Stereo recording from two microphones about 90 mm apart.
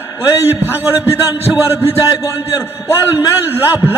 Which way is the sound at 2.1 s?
35° left (ahead or behind).